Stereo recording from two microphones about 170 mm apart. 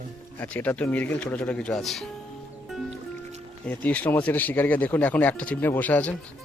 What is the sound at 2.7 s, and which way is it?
Music, centre (ahead or behind).